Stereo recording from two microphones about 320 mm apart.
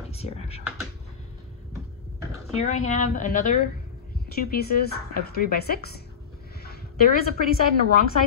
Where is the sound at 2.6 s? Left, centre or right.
Left.